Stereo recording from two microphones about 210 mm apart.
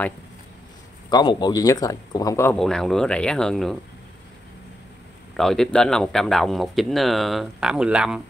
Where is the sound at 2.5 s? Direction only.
Centre (ahead or behind).